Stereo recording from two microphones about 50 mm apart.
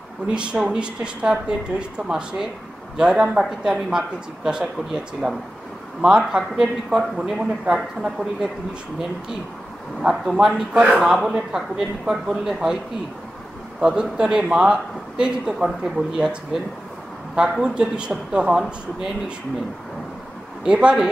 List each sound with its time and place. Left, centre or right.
0.3 s speech: centre
10.2 s speech: centre
13.7 s speech: centre
17.4 s speech: centre
20.6 s speech: centre